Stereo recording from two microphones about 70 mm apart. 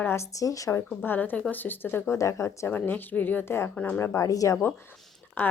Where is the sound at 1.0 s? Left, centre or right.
Left.